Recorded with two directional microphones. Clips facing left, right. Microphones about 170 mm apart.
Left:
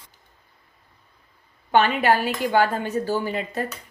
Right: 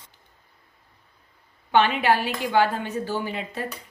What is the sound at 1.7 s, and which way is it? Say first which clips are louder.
Speech: left 1 dB; 45° left (ahead or behind).